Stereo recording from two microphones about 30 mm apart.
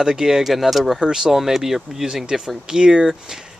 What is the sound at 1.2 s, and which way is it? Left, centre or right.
Speech, centre.